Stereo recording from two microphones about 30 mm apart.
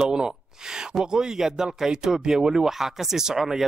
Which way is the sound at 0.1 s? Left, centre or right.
Right.